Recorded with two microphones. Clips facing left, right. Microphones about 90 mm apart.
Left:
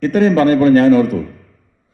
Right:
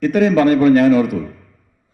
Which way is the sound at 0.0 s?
35° left (ahead or behind).